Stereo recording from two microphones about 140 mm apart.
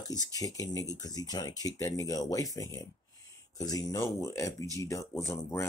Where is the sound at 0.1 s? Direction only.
25° left (ahead or behind).